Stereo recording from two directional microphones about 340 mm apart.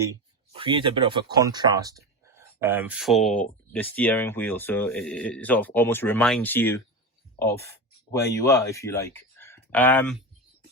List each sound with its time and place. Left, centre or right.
0.0 s speech: centre